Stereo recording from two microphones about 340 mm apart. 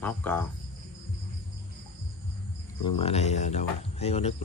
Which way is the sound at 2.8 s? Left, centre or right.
Centre.